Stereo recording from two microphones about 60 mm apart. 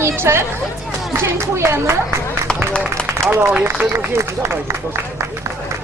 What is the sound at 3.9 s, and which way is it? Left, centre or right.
Speech, right.